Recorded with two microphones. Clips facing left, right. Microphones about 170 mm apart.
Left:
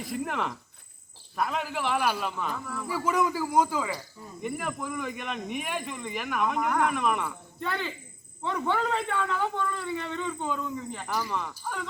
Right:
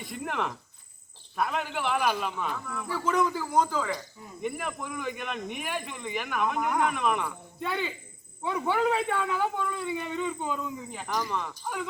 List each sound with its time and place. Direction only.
0.0 s a man's voice: centre (ahead or behind)
11.1 s a man's voice: 5° left (ahead or behind)
11.6 s speech: 10° right (ahead or behind)